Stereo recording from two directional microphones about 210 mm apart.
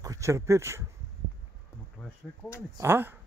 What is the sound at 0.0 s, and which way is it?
Speech, 15° right (ahead or behind).